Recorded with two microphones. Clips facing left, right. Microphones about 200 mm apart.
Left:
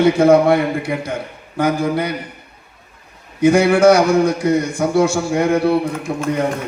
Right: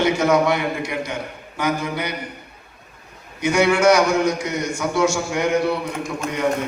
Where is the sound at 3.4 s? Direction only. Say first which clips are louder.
Left 6 dB; 30° left (ahead or behind).